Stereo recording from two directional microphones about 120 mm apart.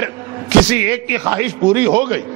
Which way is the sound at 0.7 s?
20° right (ahead or behind).